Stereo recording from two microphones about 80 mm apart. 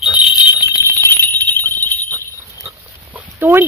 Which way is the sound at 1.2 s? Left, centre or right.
Left.